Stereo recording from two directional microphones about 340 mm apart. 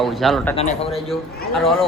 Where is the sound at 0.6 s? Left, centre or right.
Centre.